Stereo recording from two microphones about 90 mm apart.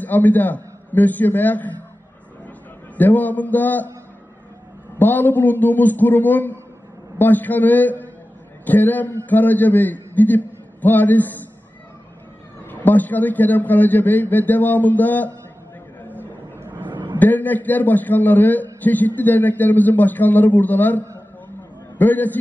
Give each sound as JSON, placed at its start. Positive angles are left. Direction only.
{"t": 0.0, "sound": "a man's voice", "side_deg": 20}
{"t": 3.0, "sound": "a man's voice", "side_deg": 20}
{"t": 4.9, "sound": "a man's voice", "side_deg": 20}
{"t": 12.6, "sound": "a man's voice", "side_deg": 20}
{"t": 16.5, "sound": "a sound", "side_deg": -25}
{"t": 17.2, "sound": "a man's voice", "side_deg": 20}